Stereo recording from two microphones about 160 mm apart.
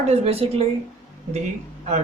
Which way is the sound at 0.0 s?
40° right (ahead or behind).